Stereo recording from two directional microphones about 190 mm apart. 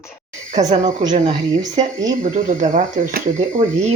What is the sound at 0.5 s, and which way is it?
Speech, 40° right (ahead or behind).